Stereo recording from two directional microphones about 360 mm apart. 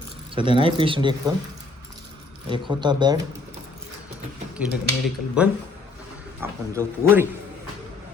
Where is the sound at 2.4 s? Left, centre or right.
Centre.